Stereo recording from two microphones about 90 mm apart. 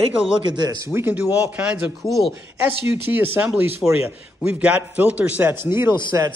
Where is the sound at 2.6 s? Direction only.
20° right (ahead or behind).